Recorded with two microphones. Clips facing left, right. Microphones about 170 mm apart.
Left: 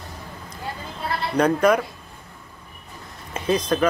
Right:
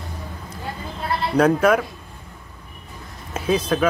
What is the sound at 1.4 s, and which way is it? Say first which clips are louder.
Speech: right 1 dB; 5° right (ahead or behind).